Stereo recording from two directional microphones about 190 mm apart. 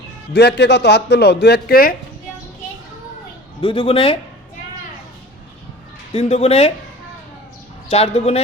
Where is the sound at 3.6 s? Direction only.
30° left (ahead or behind).